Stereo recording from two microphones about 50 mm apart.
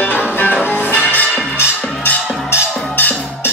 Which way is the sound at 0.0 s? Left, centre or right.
Left.